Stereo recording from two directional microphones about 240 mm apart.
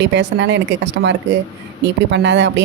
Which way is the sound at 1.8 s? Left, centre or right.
Right.